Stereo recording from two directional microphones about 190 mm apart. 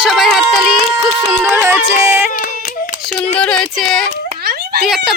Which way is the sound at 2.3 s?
45° left (ahead or behind).